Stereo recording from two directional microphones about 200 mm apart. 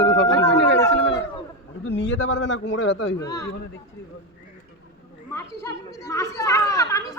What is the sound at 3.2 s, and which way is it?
Speech, 15° left (ahead or behind).